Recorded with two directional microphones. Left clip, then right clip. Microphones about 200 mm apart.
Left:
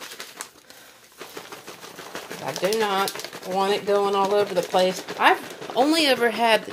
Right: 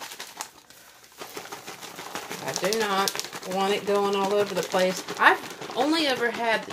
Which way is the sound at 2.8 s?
30° left (ahead or behind).